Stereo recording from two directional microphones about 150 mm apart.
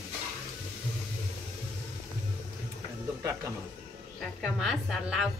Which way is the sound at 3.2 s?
20° right (ahead or behind).